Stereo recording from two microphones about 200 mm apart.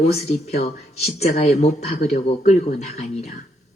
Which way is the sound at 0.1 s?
30° left (ahead or behind).